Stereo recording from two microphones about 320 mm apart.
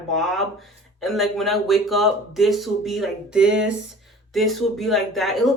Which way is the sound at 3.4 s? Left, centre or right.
Right.